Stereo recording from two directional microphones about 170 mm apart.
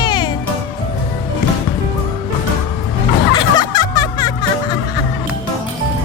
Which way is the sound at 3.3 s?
25° left (ahead or behind).